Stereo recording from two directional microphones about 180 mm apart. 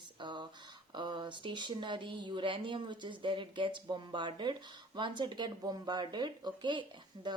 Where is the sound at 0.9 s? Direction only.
25° right (ahead or behind).